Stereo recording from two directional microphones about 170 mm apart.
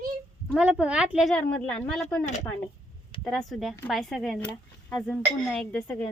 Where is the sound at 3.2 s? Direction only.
Centre (ahead or behind).